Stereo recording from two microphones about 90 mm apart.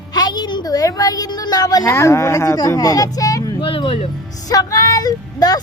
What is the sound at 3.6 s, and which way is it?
Speech, 80° left.